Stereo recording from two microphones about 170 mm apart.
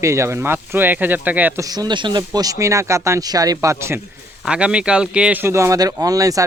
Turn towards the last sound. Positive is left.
turn(degrees=-20)  # may be behind; listen again after turning